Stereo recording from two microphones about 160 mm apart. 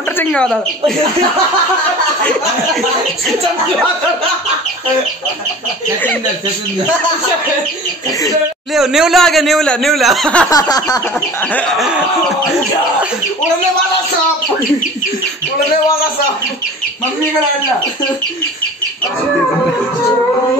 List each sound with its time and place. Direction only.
0.2 s speech: 5° left (ahead or behind)
8.7 s speech: 5° right (ahead or behind)
10.5 s a sound: 20° left (ahead or behind)
11.1 s chicken: 10° left (ahead or behind)